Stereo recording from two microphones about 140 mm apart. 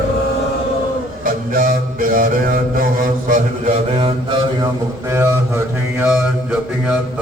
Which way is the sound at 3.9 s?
40° right (ahead or behind).